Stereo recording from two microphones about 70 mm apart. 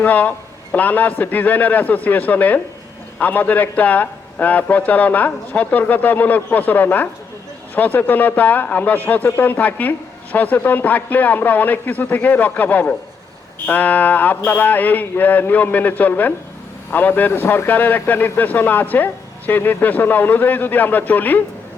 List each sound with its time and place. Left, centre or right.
0.0 s speech: left